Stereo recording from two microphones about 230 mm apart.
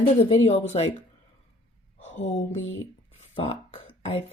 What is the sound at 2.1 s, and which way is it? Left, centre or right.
Speech, left.